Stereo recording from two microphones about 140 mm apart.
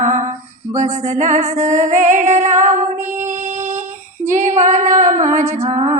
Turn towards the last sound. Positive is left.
turn(degrees=-50)  # may be behind; listen again after turning